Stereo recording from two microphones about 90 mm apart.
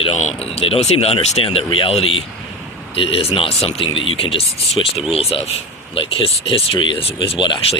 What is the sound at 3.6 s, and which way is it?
Speech, 75° left (ahead or behind).